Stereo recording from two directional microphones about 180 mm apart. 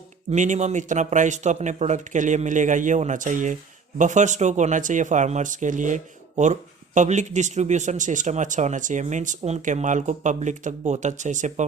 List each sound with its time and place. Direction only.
0.3 s speech: 40° right (ahead or behind)